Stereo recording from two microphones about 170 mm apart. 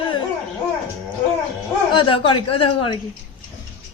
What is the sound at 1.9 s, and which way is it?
A woman's voice, 30° left (ahead or behind).